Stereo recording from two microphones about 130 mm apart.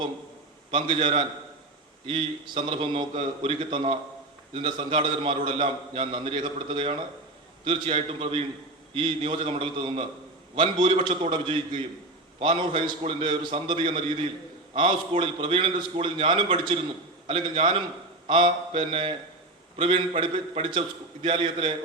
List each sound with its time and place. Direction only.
0.7 s a man's voice: 40° right (ahead or behind)